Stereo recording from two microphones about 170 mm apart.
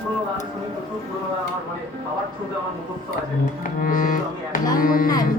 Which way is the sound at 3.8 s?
55° left (ahead or behind).